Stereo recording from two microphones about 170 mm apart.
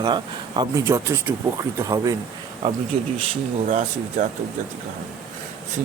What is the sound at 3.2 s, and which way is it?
Speech, 45° right (ahead or behind).